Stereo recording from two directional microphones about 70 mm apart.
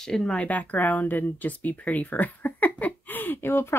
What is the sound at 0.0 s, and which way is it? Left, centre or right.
Speech, centre.